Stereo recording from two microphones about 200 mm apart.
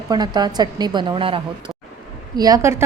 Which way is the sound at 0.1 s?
20° right (ahead or behind).